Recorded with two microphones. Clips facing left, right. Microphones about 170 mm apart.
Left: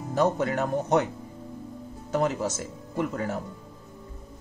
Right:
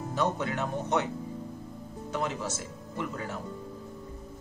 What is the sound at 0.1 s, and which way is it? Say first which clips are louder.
Speech: left 6 dB; 45° left (ahead or behind).